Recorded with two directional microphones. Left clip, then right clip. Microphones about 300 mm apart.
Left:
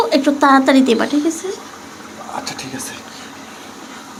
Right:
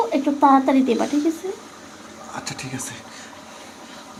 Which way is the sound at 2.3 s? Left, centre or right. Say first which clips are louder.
Left 5 dB; right.